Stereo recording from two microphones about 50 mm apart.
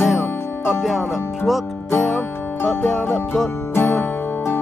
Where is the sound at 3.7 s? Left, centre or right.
Left.